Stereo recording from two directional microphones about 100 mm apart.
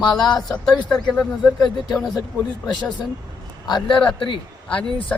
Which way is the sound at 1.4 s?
45° left (ahead or behind).